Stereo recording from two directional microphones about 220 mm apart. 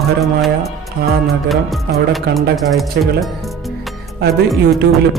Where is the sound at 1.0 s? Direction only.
45° right (ahead or behind).